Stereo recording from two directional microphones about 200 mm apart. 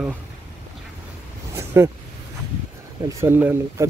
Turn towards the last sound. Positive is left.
turn(degrees=-10)  # may be behind; listen again after turning